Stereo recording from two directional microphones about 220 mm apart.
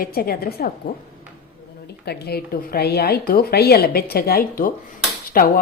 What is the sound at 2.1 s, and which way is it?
A woman's voice, 45° left (ahead or behind).